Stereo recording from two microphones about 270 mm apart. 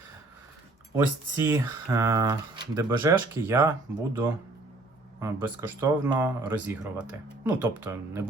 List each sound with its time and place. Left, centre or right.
0.9 s speech: centre